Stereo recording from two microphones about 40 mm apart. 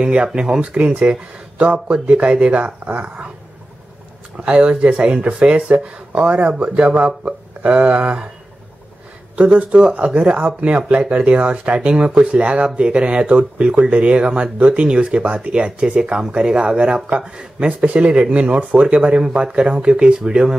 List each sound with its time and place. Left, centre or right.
0.0 s speech: right
0.6 s speech: right
4.4 s speech: right
7.6 s speech: right
9.3 s speech: right
9.7 s speech: right
9.9 s speech: right; by 17.6 s centre
17.6 s speech: right; by 20.5 s centre